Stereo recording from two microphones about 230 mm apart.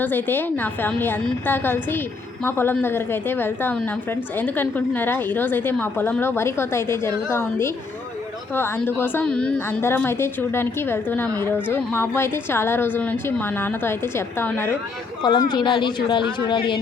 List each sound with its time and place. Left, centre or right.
0.0 s a woman's voice: centre